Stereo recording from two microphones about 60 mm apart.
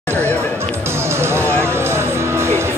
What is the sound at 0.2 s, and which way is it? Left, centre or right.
Chatter, left.